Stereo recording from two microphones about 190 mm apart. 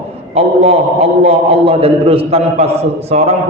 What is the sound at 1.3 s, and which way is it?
A man's voice, 30° right (ahead or behind).